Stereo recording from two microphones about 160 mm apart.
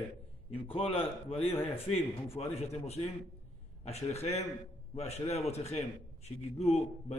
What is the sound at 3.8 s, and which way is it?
A man's voice, 40° left (ahead or behind).